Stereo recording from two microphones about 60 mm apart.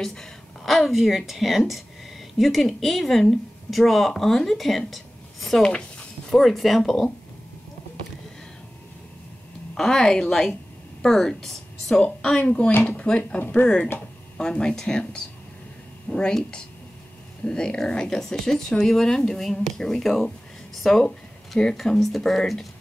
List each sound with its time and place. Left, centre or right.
0.0 s speech: centre
5.6 s speech: centre
6.3 s speech: centre
9.8 s a woman's voice: centre
12.0 s speech: centre
14.4 s speech: centre
17.5 s speech: centre